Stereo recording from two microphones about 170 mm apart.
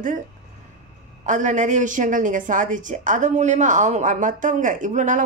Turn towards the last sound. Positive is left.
turn(degrees=-50)  # may be behind; listen again after turning